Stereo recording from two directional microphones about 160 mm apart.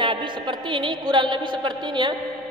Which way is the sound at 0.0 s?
30° right (ahead or behind).